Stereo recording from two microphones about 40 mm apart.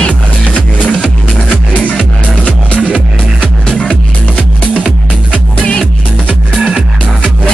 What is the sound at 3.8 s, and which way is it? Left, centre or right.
Music, left.